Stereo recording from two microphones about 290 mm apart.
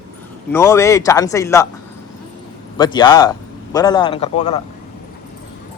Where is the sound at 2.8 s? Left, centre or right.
Centre.